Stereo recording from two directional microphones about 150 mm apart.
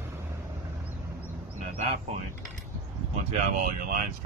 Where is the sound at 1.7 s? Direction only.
45° right (ahead or behind).